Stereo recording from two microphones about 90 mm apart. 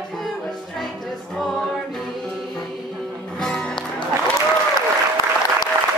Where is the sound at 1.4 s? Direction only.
Centre (ahead or behind).